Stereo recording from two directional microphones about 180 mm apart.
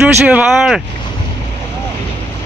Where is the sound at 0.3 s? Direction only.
5° right (ahead or behind).